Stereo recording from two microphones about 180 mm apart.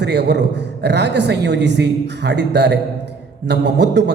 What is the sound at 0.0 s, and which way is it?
Speech, 70° right (ahead or behind).